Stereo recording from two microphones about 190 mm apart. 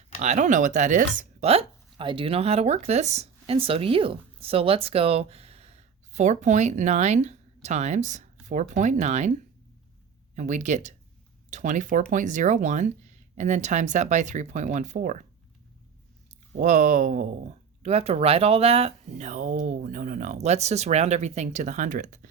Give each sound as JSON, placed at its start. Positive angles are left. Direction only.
{"t": 0.2, "sound": "speech", "side_deg": -40}
{"t": 10.3, "sound": "speech", "side_deg": -40}
{"t": 16.5, "sound": "speech", "side_deg": -40}